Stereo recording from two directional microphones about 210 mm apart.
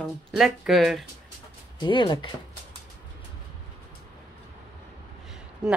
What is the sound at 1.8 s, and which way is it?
Speech, 20° left (ahead or behind).